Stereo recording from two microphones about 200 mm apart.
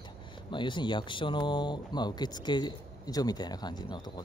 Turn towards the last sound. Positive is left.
turn(degrees=20)  # may be behind; listen again after turning